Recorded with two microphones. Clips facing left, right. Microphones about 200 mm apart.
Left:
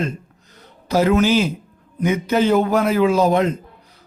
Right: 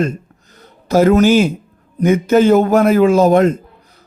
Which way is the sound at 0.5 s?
45° right (ahead or behind).